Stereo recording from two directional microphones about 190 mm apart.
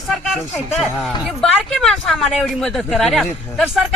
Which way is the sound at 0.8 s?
Centre (ahead or behind).